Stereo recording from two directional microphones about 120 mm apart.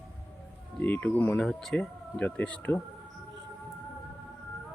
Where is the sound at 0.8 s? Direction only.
15° left (ahead or behind).